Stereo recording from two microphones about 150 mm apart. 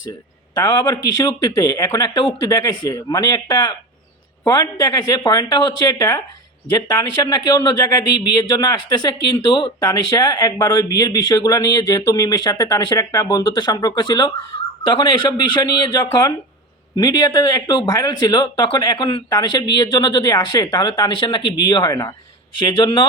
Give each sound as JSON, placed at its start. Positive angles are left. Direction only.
{"t": 0.5, "sound": "a man's voice", "side_deg": 30}